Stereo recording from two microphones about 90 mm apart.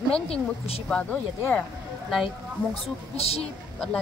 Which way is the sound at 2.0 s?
Centre (ahead or behind).